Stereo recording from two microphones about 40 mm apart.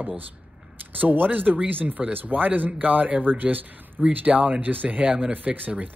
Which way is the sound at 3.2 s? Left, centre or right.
Right.